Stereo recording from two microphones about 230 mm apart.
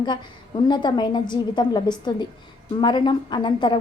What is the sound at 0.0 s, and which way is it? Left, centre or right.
A woman's voice, centre.